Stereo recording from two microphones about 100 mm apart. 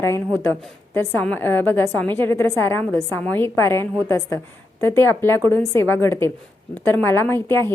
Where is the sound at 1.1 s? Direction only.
15° left (ahead or behind).